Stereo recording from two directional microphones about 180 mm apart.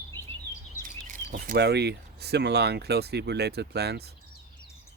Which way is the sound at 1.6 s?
65° right (ahead or behind).